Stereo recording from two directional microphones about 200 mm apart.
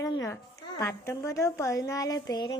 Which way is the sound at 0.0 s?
15° left (ahead or behind).